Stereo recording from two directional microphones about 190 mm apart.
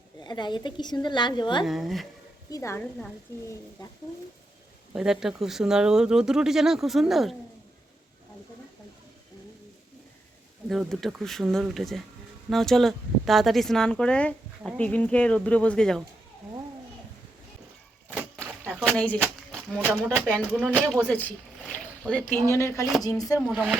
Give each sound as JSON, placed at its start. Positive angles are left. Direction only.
{"t": 0.2, "sound": "a woman's voice", "side_deg": 25}
{"t": 1.6, "sound": "speech", "side_deg": 0}
{"t": 2.5, "sound": "speech", "side_deg": 15}
{"t": 3.8, "sound": "a woman's voice", "side_deg": 20}
{"t": 4.9, "sound": "speech", "side_deg": -5}
{"t": 10.7, "sound": "speech", "side_deg": 0}
{"t": 18.9, "sound": "speech", "side_deg": 5}
{"t": 21.1, "sound": "a sound", "side_deg": 10}
{"t": 22.4, "sound": "a woman's voice", "side_deg": 15}
{"t": 23.5, "sound": "speech", "side_deg": -5}